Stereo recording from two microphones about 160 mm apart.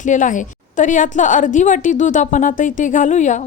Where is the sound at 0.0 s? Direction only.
55° left (ahead or behind).